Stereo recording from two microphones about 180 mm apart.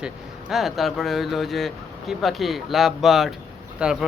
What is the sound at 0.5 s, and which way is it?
Speech, centre (ahead or behind).